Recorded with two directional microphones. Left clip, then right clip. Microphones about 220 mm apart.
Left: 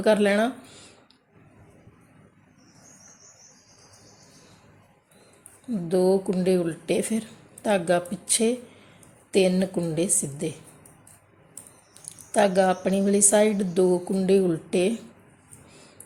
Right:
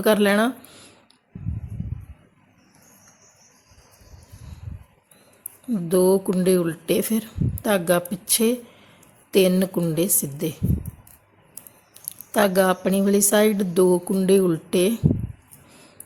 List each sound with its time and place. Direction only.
0.0 s speech: 20° right (ahead or behind)
5.7 s speech: 25° right (ahead or behind)
11.9 s speech: 20° right (ahead or behind)